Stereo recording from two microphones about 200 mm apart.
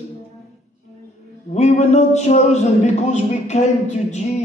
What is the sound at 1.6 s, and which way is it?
A woman's voice, 35° left (ahead or behind).